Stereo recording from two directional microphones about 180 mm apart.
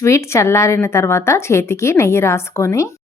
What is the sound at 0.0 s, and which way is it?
Speech, 15° left (ahead or behind).